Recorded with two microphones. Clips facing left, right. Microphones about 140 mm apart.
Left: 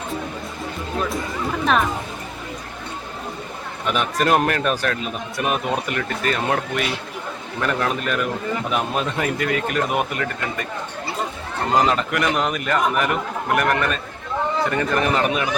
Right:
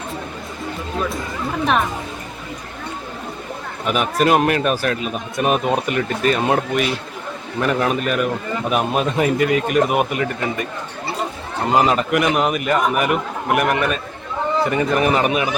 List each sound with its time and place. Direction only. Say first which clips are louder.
3.8 s a man's voice: right 3 dB; 10° right (ahead or behind)
5.4 s a man's voice: right 5 dB; 20° right (ahead or behind)
11.7 s a man's voice: right 3 dB; 10° right (ahead or behind)